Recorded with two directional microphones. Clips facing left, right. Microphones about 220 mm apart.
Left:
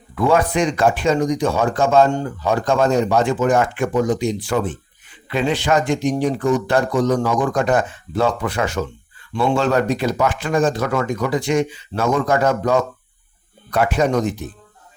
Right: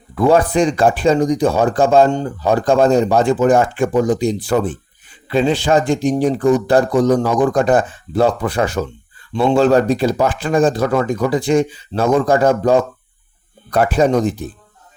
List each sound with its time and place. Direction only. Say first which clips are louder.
0.2 s speech: right 4 dB; 35° right (ahead or behind)